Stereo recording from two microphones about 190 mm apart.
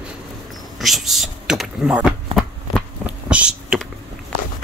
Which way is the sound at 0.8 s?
Centre (ahead or behind).